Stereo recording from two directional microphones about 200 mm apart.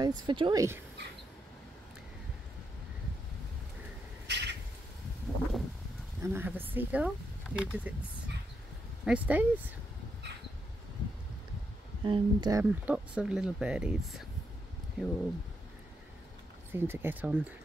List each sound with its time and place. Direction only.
0.0 s speech: 20° right (ahead or behind)
4.3 s a sound: 60° right (ahead or behind)
5.3 s a sound: 5° left (ahead or behind)
6.2 s speech: 10° right (ahead or behind)
9.0 s speech: 5° right (ahead or behind)
12.0 s speech: 20° right (ahead or behind)
12.9 s speech: 5° right (ahead or behind)
16.7 s speech: 10° right (ahead or behind)